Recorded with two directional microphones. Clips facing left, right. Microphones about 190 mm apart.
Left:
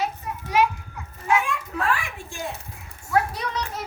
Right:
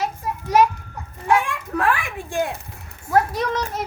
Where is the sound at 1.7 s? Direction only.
55° right (ahead or behind).